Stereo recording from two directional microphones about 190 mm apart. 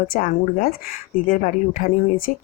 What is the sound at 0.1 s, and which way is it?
Speech, 50° left (ahead or behind).